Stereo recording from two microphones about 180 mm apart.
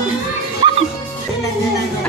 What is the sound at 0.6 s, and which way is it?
Music, 25° right (ahead or behind).